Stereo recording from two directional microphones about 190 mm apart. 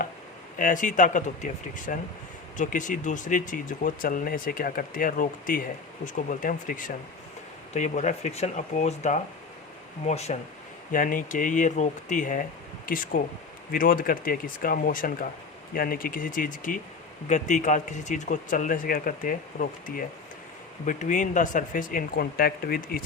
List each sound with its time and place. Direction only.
0.6 s speech: 45° left (ahead or behind)
10.9 s speech: 45° left (ahead or behind)